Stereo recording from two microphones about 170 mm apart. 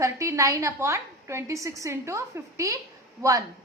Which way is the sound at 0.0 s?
15° right (ahead or behind).